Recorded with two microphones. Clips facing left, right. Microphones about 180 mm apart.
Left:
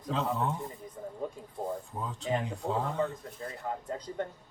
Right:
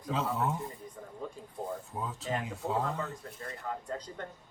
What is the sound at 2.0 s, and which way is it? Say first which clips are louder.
Speech: left 3 dB; 5° right (ahead or behind).